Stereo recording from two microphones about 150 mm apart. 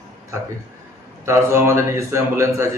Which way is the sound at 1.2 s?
20° right (ahead or behind).